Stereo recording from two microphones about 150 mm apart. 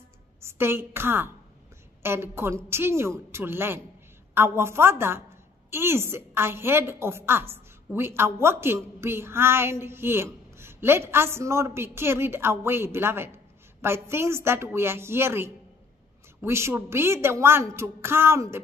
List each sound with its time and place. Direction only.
0.4 s a woman's voice: 15° right (ahead or behind)